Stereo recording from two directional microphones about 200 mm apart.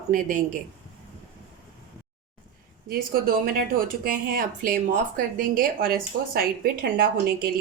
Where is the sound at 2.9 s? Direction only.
45° right (ahead or behind).